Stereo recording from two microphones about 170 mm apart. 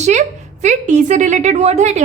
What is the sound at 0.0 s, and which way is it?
A woman's voice, 45° right (ahead or behind).